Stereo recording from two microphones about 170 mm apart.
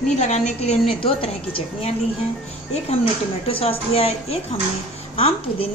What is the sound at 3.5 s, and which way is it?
A woman's voice, 35° left (ahead or behind).